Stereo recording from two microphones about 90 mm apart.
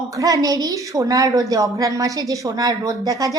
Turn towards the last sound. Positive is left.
turn(degrees=-40)  # may be behind; listen again after turning